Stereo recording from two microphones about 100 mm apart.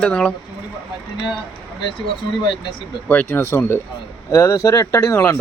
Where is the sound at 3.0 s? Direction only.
15° left (ahead or behind).